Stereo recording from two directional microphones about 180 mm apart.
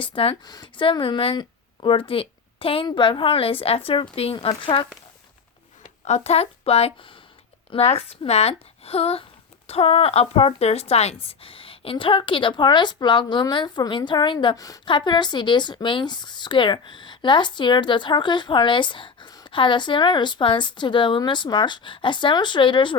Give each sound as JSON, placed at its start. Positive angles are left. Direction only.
{"t": 0.0, "sound": "speech", "side_deg": 30}
{"t": 6.1, "sound": "speech", "side_deg": 35}